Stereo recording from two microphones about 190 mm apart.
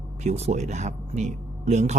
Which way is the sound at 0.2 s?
35° right (ahead or behind).